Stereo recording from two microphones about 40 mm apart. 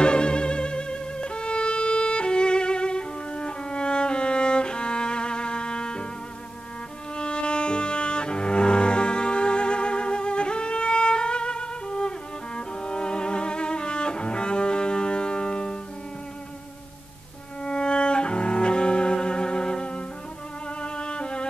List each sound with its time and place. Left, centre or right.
0.0 s violin: left
7.2 s cello: left
17.6 s cello: left
20.8 s music: left